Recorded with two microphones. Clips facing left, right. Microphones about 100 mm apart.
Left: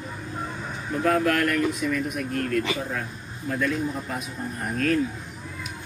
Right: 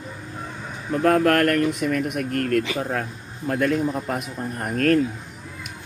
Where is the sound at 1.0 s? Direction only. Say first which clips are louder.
Right 4 dB; 55° right (ahead or behind); by 5.0 s 70° right (ahead or behind).